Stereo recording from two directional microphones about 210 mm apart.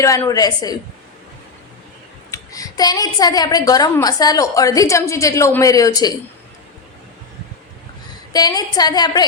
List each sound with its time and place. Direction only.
0.0 s a woman's voice: 15° left (ahead or behind)
2.3 s a woman's voice: 15° left (ahead or behind)
8.3 s a woman's voice: 20° left (ahead or behind)